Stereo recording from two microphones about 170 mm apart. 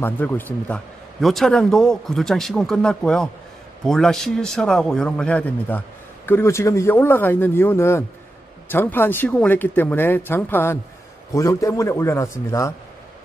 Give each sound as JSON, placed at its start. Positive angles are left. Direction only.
{"t": 0.0, "sound": "a man's voice", "side_deg": 10}